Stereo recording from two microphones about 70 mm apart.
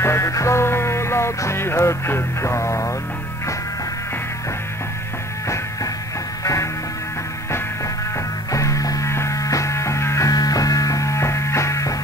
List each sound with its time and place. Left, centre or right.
0.0 s music: left
6.4 s music: left
8.5 s music: left
10.3 s music: left